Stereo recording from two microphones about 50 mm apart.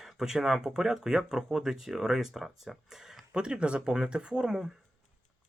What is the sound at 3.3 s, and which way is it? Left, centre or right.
Speech, centre.